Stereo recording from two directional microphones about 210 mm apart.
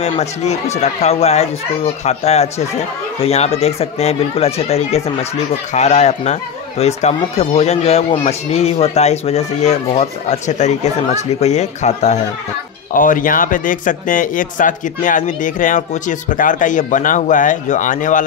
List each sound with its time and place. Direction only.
0.0 s speech: 30° left (ahead or behind)